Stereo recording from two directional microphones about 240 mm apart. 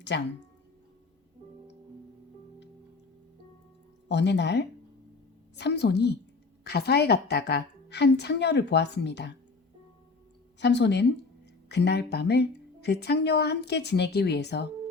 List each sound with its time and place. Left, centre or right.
0.1 s speech: left
4.1 s speech: left
10.6 s speech: left